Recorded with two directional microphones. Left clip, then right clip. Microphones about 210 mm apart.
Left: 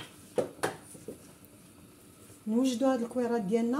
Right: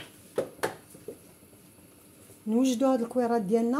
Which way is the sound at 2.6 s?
55° right (ahead or behind).